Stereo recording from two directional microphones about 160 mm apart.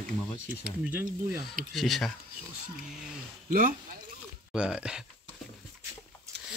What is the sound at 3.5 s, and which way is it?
Speech, 55° right (ahead or behind).